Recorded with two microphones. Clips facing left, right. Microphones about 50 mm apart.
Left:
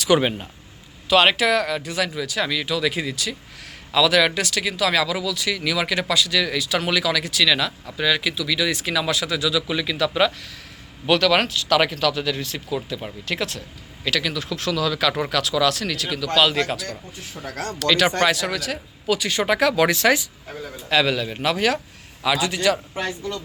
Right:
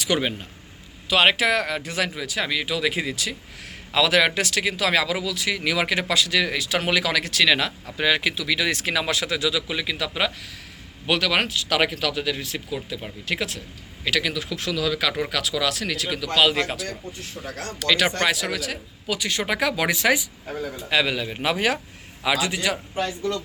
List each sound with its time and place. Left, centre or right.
0.2 s speech: centre
1.2 s speech: right
7.0 s speech: right
9.6 s speech: centre
17.7 s speech: centre